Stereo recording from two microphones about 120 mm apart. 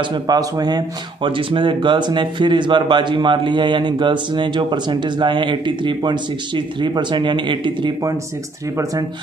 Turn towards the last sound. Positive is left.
turn(degrees=-40)  # may be behind; listen again after turning